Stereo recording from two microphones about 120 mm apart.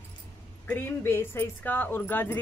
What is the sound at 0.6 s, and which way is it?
Speech, 15° left (ahead or behind).